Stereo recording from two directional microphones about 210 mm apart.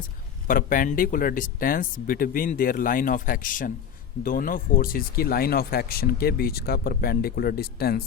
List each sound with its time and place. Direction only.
0.4 s speech: 40° left (ahead or behind)